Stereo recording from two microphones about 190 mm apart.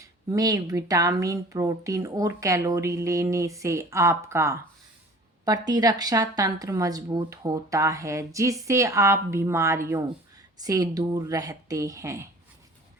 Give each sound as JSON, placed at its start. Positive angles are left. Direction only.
{"t": 0.0, "sound": "speech", "side_deg": -20}